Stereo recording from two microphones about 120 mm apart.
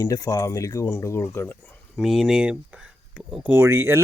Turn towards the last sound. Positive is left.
turn(degrees=-20)  # may be behind; listen again after turning